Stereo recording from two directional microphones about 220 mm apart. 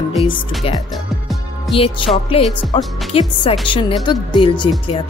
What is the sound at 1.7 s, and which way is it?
A woman's voice, 25° left (ahead or behind).